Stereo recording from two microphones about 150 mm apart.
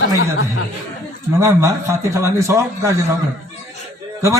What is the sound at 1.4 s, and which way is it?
A man's voice, 20° right (ahead or behind).